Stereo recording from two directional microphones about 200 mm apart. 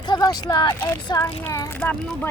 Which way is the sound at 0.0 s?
20° left (ahead or behind).